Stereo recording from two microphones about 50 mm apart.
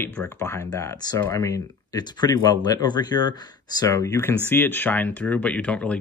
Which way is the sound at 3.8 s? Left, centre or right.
Left.